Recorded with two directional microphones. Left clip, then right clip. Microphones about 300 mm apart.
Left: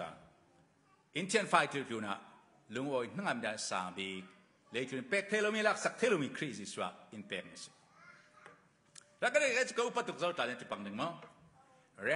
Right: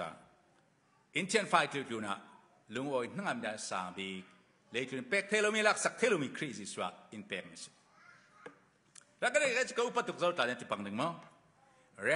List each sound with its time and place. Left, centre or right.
1.1 s a man's voice: centre
8.9 s a man's voice: centre; by 11.1 s right
12.0 s a man's voice: centre